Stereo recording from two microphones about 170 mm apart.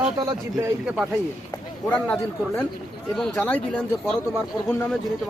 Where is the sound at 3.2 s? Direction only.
Centre (ahead or behind).